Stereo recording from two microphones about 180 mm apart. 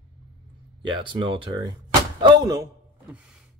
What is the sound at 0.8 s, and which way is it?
Speech, 25° right (ahead or behind).